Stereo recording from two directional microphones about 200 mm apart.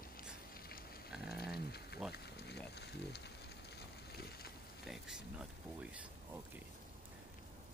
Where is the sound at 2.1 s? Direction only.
55° left (ahead or behind).